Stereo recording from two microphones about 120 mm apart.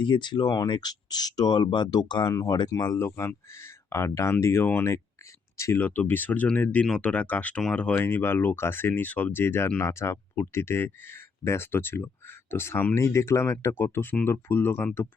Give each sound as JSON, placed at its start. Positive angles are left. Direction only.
{"t": 0.0, "sound": "speech", "side_deg": 40}
{"t": 3.2, "sound": "speech", "side_deg": 20}